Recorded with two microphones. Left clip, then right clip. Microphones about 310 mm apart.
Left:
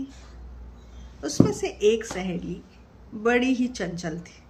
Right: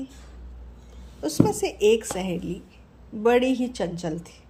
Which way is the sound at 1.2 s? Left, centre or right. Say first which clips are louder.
Right 1 dB; centre.